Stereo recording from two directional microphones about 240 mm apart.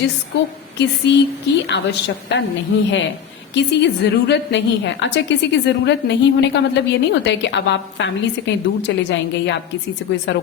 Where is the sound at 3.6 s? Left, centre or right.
Left.